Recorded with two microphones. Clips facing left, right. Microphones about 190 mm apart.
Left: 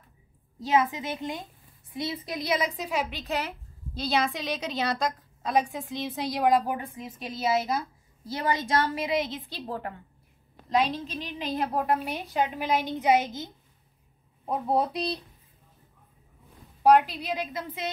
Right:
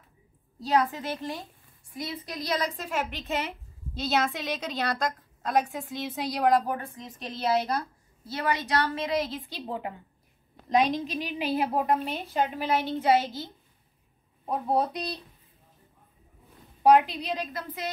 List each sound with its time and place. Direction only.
0.8 s a woman's voice: 15° left (ahead or behind)
2.5 s a woman's voice: 5° left (ahead or behind)
8.3 s a woman's voice: 20° left (ahead or behind)
8.9 s a woman's voice: centre (ahead or behind)
10.7 s a woman's voice: 15° right (ahead or behind); by 12.1 s centre (ahead or behind)
12.1 s a woman's voice: 15° left (ahead or behind)
14.5 s a woman's voice: 20° left (ahead or behind)
16.8 s a woman's voice: centre (ahead or behind)